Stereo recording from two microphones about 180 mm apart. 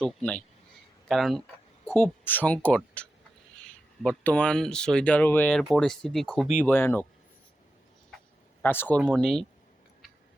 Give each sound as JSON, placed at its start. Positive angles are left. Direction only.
{"t": 0.0, "sound": "speech", "side_deg": 5}
{"t": 8.6, "sound": "speech", "side_deg": 10}